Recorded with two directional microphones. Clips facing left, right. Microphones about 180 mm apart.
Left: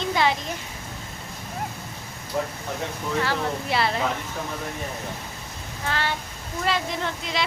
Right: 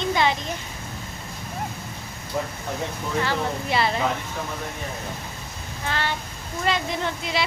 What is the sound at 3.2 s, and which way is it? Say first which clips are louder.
Speech: even; centre (ahead or behind).